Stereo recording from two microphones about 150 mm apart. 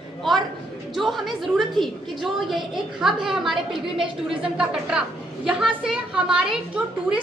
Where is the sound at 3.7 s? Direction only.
35° right (ahead or behind).